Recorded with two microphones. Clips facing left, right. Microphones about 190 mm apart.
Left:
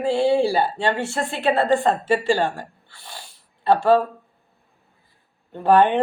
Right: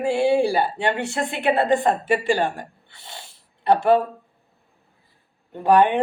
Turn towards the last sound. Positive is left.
turn(degrees=-15)  # may be behind; listen again after turning